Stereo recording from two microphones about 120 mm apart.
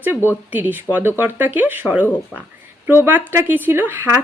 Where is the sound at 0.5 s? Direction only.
15° right (ahead or behind).